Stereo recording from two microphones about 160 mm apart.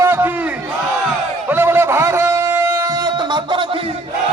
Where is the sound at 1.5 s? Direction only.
15° right (ahead or behind).